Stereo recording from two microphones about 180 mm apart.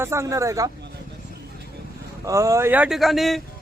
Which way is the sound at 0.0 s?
15° right (ahead or behind).